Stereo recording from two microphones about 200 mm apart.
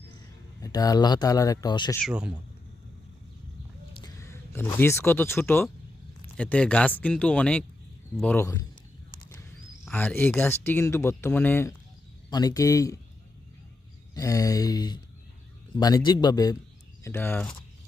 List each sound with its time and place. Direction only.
0.6 s speech: 20° left (ahead or behind)
2.0 s speech: 5° right (ahead or behind)
4.0 s speech: 15° left (ahead or behind)
9.8 s speech: 5° left (ahead or behind)
14.1 s speech: 15° left (ahead or behind)